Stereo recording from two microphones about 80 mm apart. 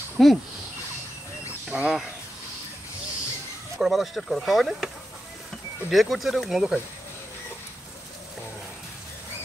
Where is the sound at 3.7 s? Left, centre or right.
Centre.